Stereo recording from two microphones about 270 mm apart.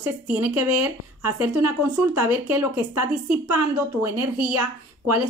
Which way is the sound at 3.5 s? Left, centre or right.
Right.